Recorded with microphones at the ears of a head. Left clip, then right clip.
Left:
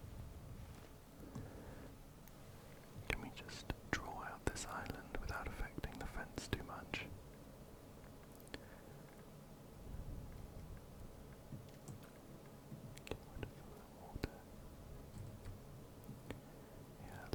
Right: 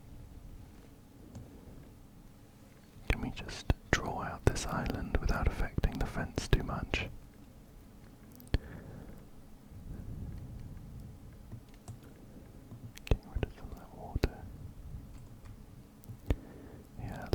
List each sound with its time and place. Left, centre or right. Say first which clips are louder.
3.1 s whispering: right 7 dB; right
8.5 s a sound: right 12 dB; right
9.9 s thunder: right 5 dB; right
13.1 s whispering: right 11 dB; right
16.2 s whispering: right 13 dB; right